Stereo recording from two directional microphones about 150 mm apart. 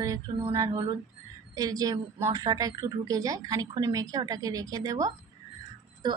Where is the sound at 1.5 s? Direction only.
25° right (ahead or behind).